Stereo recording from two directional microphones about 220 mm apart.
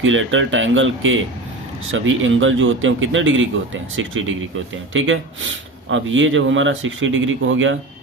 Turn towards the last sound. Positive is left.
turn(degrees=-60)  # may be behind; listen again after turning